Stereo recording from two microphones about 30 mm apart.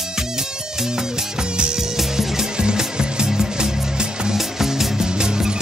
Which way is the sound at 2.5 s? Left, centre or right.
Right.